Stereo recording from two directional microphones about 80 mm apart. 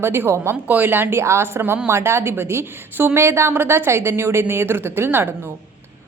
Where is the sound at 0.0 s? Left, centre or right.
Right.